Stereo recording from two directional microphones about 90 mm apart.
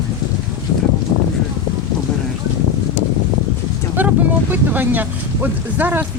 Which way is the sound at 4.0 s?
20° right (ahead or behind).